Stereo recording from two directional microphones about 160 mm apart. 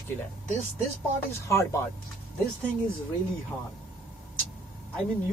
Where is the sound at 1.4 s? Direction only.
15° left (ahead or behind).